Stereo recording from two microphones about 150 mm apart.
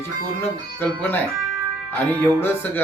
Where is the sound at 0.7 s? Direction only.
15° left (ahead or behind).